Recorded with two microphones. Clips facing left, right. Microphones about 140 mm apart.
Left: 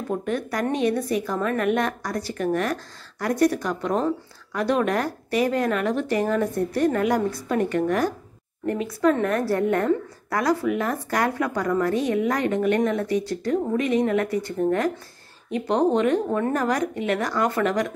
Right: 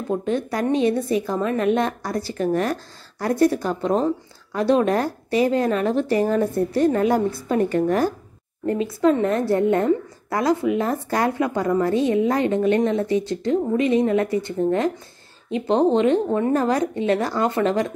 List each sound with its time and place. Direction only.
0.2 s a woman's voice: 25° right (ahead or behind)